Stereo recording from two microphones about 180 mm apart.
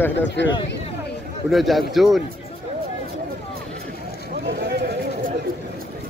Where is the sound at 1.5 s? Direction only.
Centre (ahead or behind).